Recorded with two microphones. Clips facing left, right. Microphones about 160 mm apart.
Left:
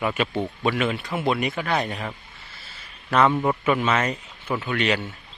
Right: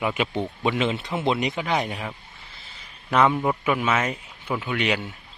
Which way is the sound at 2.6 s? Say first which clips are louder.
Left 1 dB; 20° right (ahead or behind).